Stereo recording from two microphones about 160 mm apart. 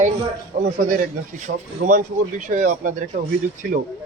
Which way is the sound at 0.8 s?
55° right (ahead or behind).